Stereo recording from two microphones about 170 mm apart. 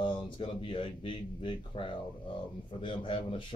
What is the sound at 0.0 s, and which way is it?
Speech, 30° left (ahead or behind).